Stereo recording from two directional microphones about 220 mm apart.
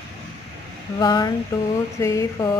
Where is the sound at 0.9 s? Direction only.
20° left (ahead or behind).